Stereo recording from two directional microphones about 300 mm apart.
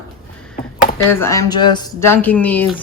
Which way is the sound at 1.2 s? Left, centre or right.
Centre.